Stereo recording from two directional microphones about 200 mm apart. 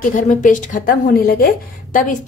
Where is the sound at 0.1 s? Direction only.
40° left (ahead or behind).